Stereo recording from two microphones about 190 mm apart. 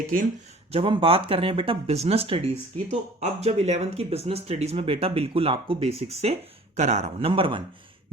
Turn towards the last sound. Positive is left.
turn(degrees=-30)  # may be behind; listen again after turning